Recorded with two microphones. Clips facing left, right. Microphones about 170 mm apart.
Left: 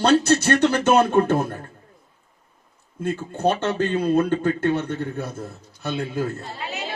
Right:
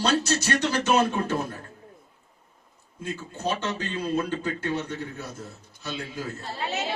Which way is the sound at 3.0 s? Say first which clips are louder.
Left 8 dB; 55° left (ahead or behind).